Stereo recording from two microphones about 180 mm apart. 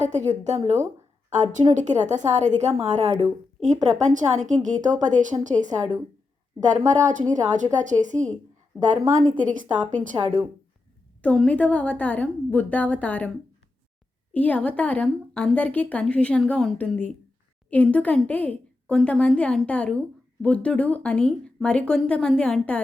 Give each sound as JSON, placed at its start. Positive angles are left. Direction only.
{"t": 0.0, "sound": "a woman's voice", "side_deg": -40}
{"t": 9.3, "sound": "a woman's voice", "side_deg": -45}
{"t": 11.2, "sound": "a woman's voice", "side_deg": 10}
{"t": 14.3, "sound": "a woman's voice", "side_deg": 10}